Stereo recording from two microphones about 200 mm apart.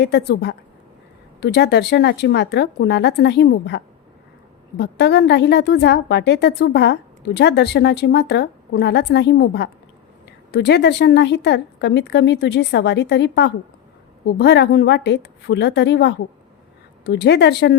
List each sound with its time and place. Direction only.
0.0 s a woman's voice: 55° left (ahead or behind)
4.8 s a woman's voice: 55° left (ahead or behind)